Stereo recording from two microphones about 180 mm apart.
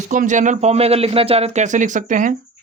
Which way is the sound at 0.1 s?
45° right (ahead or behind).